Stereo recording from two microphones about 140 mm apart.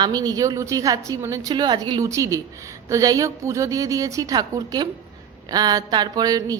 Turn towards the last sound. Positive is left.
turn(degrees=-25)  # may be behind; listen again after turning